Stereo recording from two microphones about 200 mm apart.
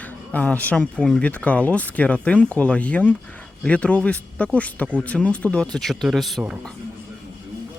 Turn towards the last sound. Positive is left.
turn(degrees=0)  # may be behind; listen again after turning